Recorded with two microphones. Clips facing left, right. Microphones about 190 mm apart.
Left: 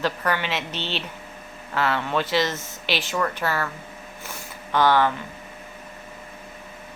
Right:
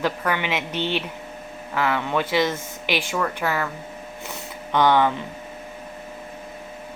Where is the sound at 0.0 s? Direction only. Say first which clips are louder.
Right 1 dB; 15° right (ahead or behind).